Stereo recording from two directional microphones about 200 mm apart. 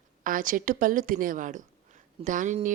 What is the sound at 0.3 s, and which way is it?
A woman's voice, 40° right (ahead or behind).